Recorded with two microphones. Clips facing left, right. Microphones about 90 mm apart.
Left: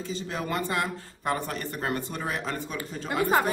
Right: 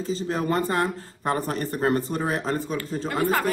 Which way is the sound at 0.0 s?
35° right (ahead or behind).